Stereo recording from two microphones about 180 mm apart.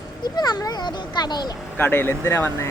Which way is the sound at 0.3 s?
20° left (ahead or behind).